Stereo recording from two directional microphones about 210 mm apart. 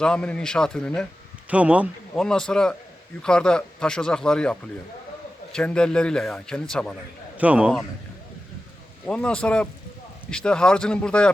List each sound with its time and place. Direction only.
0.0 s a man's voice: 5° left (ahead or behind)
7.3 s a man's voice: 5° right (ahead or behind)
9.0 s a man's voice: 5° left (ahead or behind)